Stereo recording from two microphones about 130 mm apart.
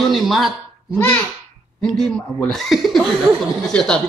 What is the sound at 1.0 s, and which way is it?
A child's voice, 15° left (ahead or behind).